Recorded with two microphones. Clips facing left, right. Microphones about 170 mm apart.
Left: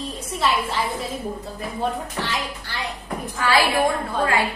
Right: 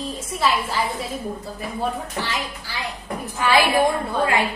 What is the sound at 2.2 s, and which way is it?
Speech, centre (ahead or behind).